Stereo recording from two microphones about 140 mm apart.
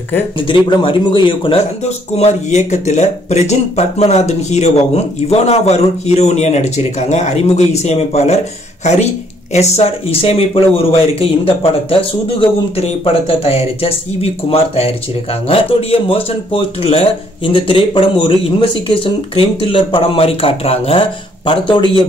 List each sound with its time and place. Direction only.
0.5 s speech: 35° left (ahead or behind)
2.1 s speech: 55° left (ahead or behind); by 21.8 s 35° left (ahead or behind)